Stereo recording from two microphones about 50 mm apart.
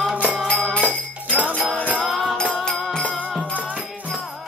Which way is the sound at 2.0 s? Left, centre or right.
Centre.